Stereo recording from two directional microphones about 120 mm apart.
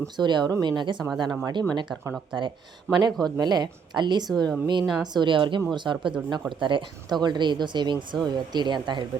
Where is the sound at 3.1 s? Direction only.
5° left (ahead or behind).